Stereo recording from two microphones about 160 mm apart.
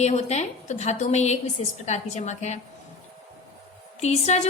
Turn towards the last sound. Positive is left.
turn(degrees=45)  # may be behind; listen again after turning